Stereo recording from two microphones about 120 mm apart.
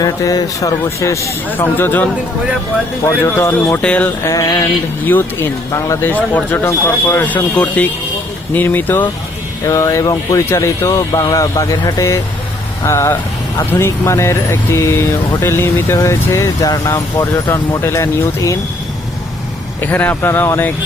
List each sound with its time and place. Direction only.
0.0 s speech: 30° left (ahead or behind)
3.3 s speech: 20° left (ahead or behind)
3.8 s speech: 10° left (ahead or behind)
4.2 s speech: 25° left (ahead or behind)
5.0 s speech: 20° left (ahead or behind)
9.6 s speech: 25° left (ahead or behind)
19.8 s speech: 15° left (ahead or behind)